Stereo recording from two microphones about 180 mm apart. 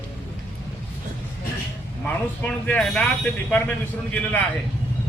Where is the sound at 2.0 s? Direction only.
5° left (ahead or behind).